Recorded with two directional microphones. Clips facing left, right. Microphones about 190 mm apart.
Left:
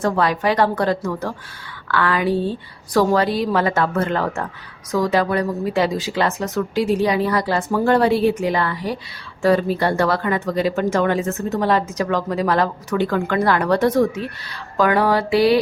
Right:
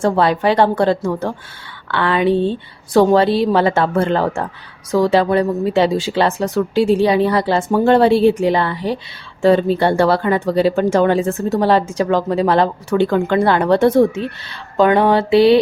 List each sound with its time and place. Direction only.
0.0 s speech: 30° right (ahead or behind)